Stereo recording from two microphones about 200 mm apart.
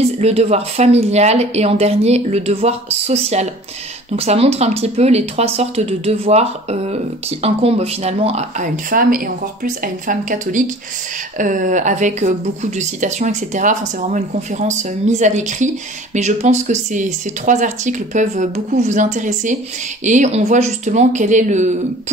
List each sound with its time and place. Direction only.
0.0 s speech: 30° right (ahead or behind)